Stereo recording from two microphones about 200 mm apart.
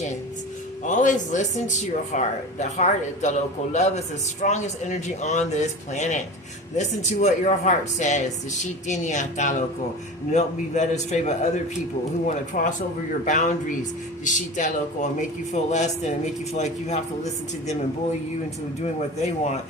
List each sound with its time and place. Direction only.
0.9 s speech: 40° left (ahead or behind)
18.8 s speech: 35° left (ahead or behind)